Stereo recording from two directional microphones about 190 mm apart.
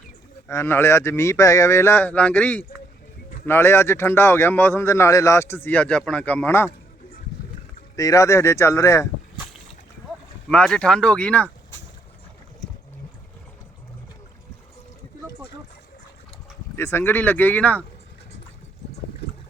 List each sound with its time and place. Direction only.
0.4 s a man's voice: 10° left (ahead or behind)
7.9 s a man's voice: 15° left (ahead or behind)
10.5 s speech: 5° left (ahead or behind)
16.7 s a man's voice: 15° left (ahead or behind)